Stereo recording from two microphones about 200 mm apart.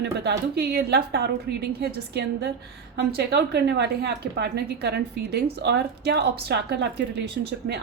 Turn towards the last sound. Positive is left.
turn(degrees=-55)  # may be behind; listen again after turning